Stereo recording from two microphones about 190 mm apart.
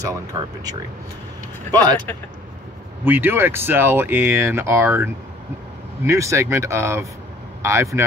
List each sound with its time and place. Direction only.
0.0 s speech: 20° right (ahead or behind)
3.1 s speech: 10° right (ahead or behind)